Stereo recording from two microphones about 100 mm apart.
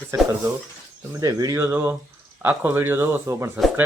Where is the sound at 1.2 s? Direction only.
35° right (ahead or behind).